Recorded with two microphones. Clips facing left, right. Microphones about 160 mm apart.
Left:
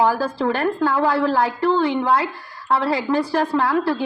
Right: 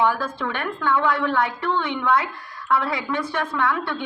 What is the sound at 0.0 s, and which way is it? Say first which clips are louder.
A woman's voice: left 4 dB; 35° left (ahead or behind).